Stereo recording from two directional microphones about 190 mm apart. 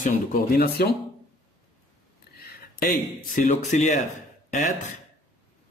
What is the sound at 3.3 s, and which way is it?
Speech, 40° left (ahead or behind).